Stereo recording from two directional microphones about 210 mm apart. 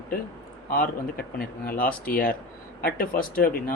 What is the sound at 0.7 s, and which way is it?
Speech, 45° left (ahead or behind).